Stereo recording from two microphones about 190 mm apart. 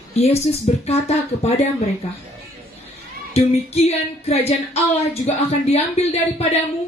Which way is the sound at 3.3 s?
35° left (ahead or behind).